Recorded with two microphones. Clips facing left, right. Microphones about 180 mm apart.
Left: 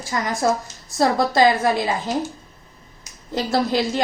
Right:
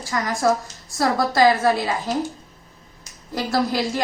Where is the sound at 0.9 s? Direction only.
25° left (ahead or behind).